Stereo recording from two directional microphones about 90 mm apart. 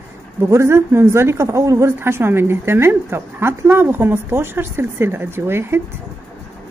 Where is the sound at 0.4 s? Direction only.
30° right (ahead or behind).